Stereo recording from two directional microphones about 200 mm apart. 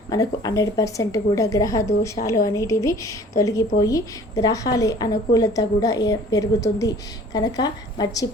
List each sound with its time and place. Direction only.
0.1 s a woman's voice: 20° left (ahead or behind)